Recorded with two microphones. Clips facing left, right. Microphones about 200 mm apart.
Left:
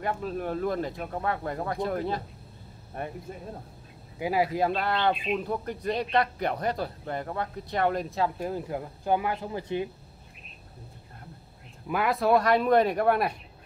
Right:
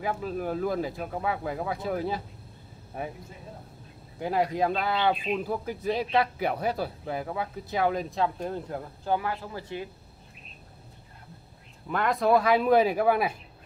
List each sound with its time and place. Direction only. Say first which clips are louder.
0.0 s speech: even; centre (ahead or behind)
4.2 s speech: even; 5° left (ahead or behind)
11.9 s speech: even; 5° left (ahead or behind)